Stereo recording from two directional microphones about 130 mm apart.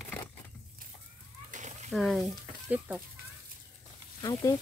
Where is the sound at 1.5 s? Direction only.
70° right (ahead or behind).